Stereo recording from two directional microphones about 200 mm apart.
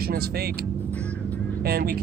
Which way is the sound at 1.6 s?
50° right (ahead or behind).